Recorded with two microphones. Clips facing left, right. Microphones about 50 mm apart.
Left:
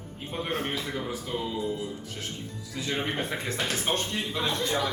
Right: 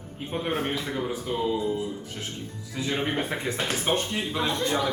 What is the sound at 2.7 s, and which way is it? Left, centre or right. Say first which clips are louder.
Speech: right 3 dB; centre.